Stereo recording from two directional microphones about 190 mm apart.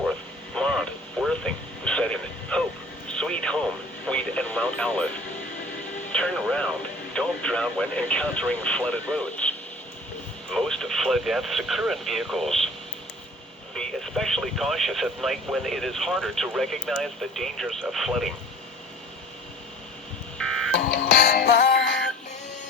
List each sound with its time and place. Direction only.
0.5 s radio: 5° left (ahead or behind)
6.1 s speech: 5° left (ahead or behind)
13.7 s speech: centre (ahead or behind)
20.4 s telephone dialing: centre (ahead or behind)
20.7 s music: 60° left (ahead or behind)